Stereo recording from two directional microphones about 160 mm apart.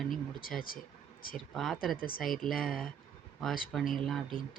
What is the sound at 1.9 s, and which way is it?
Speech, 65° left (ahead or behind).